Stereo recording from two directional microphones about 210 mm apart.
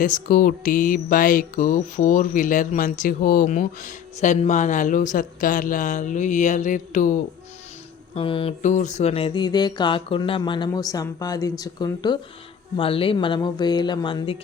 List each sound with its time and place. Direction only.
0.0 s music: 40° left (ahead or behind)
8.1 s speech: 25° left (ahead or behind)